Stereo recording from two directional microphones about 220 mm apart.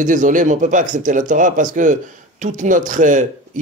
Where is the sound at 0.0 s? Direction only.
35° right (ahead or behind).